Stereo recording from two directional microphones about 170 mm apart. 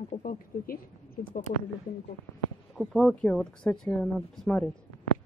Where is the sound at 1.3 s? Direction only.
45° left (ahead or behind).